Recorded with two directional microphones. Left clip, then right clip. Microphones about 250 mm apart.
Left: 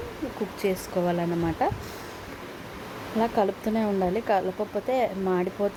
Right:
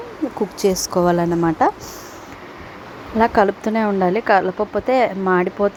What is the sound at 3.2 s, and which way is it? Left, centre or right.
A woman's voice, centre.